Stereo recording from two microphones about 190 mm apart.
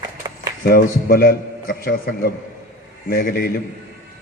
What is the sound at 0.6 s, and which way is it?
A man's voice, 50° left (ahead or behind).